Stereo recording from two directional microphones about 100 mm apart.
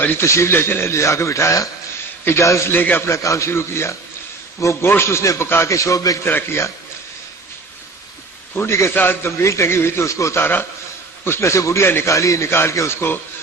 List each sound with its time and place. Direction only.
0.0 s a man's voice: 20° left (ahead or behind); by 6.1 s 35° left (ahead or behind)
6.2 s a man's voice: 25° left (ahead or behind)
8.5 s a man's voice: 25° left (ahead or behind)